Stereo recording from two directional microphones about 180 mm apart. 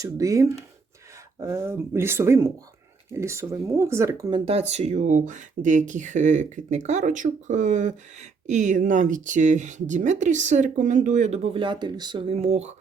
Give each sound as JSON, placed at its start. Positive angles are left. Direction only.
{"t": 0.0, "sound": "speech", "side_deg": -20}